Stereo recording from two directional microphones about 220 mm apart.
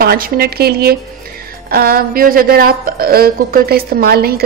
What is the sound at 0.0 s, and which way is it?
A woman's voice, 45° right (ahead or behind).